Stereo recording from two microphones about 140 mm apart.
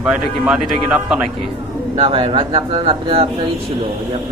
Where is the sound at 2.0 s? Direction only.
45° right (ahead or behind).